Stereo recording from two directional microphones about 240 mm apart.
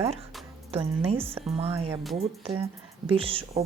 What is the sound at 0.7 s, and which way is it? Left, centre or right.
Speech, right.